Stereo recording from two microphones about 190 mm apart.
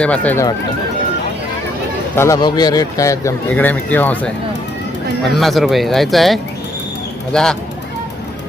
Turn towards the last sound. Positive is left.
turn(degrees=5)  # may be behind; listen again after turning